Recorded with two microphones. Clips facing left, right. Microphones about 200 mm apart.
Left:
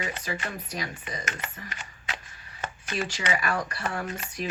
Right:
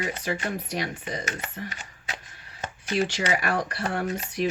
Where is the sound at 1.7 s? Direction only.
40° right (ahead or behind).